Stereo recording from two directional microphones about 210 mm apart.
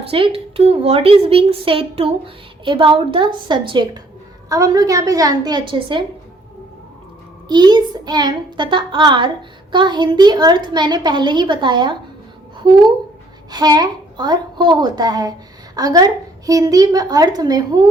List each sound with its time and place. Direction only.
0.0 s a woman's voice: 25° right (ahead or behind)
7.4 s a woman's voice: 20° right (ahead or behind)
13.5 s a woman's voice: 20° right (ahead or behind)